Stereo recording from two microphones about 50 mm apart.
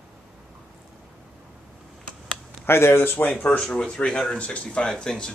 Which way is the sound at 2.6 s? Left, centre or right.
Left.